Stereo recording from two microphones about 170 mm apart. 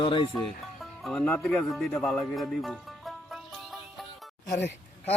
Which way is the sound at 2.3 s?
Centre (ahead or behind).